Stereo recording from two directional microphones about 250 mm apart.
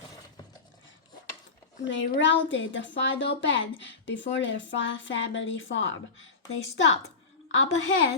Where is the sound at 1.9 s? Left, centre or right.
Left.